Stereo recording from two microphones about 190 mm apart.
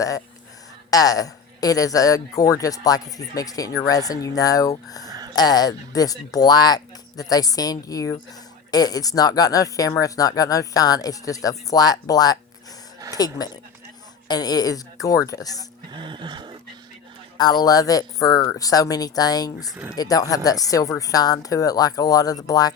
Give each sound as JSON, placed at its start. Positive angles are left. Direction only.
{"t": 0.9, "sound": "speech", "side_deg": 20}
{"t": 15.9, "sound": "music", "side_deg": -25}
{"t": 17.3, "sound": "speech", "side_deg": 20}
{"t": 19.7, "sound": "speech", "side_deg": -10}
{"t": 20.0, "sound": "speech", "side_deg": 20}